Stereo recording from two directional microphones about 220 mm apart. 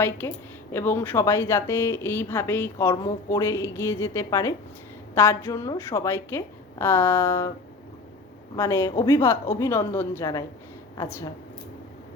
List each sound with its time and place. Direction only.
0.2 s speech: 10° left (ahead or behind)
8.5 s speech: 15° left (ahead or behind)